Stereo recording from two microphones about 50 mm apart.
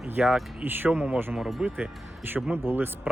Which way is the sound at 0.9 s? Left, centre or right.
Right.